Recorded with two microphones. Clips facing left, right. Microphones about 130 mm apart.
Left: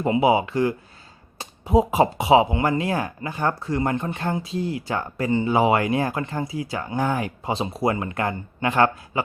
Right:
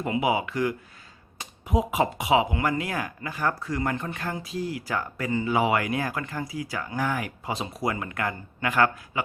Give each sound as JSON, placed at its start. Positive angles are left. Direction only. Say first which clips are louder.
{"t": 0.0, "sound": "speech", "louder": "left 6 dB", "side_deg": 30}